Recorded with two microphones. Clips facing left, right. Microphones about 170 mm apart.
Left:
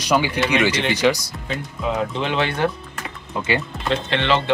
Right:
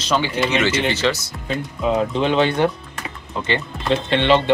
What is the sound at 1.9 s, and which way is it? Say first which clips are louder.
Speech: right 4 dB; 20° right (ahead or behind).